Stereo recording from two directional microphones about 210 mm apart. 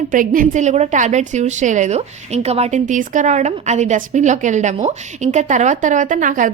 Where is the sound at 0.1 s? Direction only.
40° right (ahead or behind).